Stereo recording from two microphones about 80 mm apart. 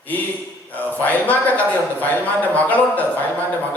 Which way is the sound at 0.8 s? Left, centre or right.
Left.